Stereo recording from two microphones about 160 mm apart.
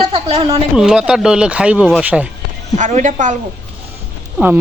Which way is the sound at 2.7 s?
50° right (ahead or behind).